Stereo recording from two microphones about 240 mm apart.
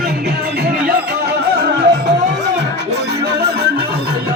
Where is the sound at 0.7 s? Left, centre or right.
Right.